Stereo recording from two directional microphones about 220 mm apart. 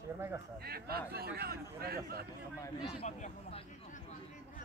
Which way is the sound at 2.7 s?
25° left (ahead or behind).